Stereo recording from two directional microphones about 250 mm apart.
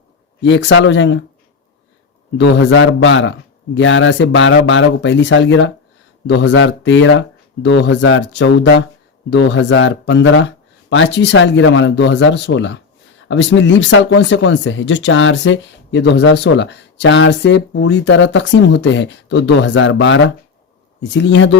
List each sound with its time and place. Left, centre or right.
0.4 s speech: left
2.6 s speech: left